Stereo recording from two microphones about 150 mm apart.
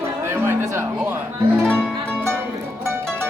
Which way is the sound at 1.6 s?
10° left (ahead or behind).